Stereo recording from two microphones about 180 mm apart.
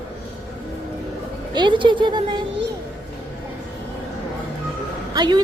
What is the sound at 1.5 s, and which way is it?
Speech, 25° right (ahead or behind).